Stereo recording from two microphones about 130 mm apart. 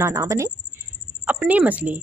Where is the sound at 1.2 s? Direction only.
10° right (ahead or behind).